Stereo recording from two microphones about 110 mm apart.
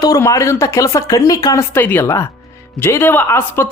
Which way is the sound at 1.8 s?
20° left (ahead or behind).